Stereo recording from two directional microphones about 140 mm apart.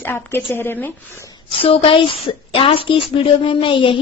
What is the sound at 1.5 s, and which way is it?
A woman's voice, 40° left (ahead or behind).